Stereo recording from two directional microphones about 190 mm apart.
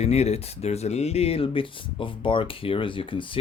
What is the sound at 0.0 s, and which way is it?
Speech, 35° left (ahead or behind).